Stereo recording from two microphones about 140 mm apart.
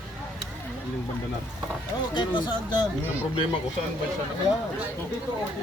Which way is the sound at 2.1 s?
35° left (ahead or behind).